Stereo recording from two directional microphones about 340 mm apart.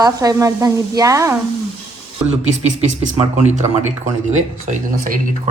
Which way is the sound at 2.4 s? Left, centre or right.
Centre.